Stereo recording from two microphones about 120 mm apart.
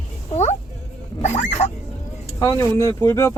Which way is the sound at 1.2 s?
75° left (ahead or behind).